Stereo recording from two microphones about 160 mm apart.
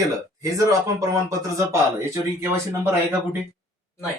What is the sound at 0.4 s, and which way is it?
Speech, 20° right (ahead or behind).